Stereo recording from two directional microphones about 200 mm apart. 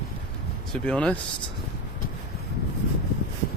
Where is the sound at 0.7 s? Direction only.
5° left (ahead or behind).